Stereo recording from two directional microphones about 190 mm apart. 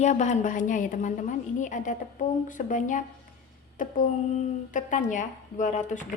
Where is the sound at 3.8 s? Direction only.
45° left (ahead or behind).